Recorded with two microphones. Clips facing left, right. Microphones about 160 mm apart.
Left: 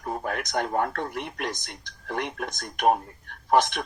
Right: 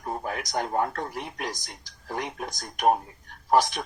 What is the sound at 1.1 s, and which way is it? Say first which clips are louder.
Speech: left 2 dB; 65° left (ahead or behind).